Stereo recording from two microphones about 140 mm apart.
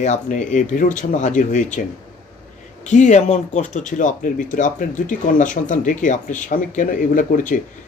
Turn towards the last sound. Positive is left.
turn(degrees=70)  # may be behind; listen again after turning